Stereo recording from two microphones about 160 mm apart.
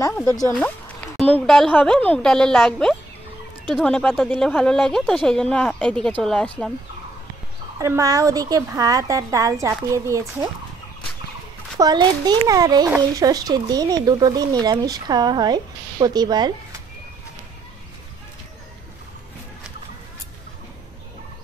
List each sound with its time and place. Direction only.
0.5 s a woman's voice: 5° left (ahead or behind)
7.8 s speech: 20° right (ahead or behind)
11.8 s speech: 25° right (ahead or behind)